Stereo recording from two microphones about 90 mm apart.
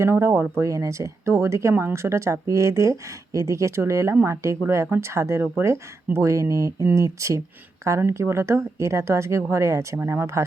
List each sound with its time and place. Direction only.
0.0 s speech: 30° right (ahead or behind)